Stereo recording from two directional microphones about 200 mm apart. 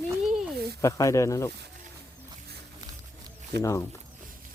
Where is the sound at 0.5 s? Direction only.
55° right (ahead or behind).